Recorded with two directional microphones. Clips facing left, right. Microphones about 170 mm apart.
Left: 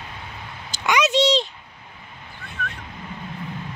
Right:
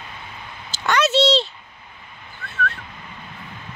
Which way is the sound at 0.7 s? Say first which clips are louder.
Right 1 dB; 15° left (ahead or behind).